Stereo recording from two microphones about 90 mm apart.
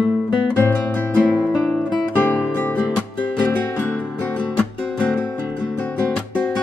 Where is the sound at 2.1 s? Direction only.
20° left (ahead or behind).